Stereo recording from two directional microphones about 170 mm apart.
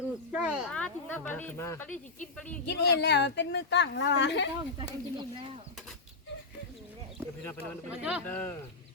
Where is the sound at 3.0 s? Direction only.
90° left.